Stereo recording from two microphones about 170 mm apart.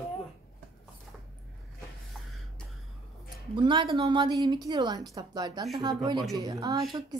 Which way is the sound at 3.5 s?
30° right (ahead or behind).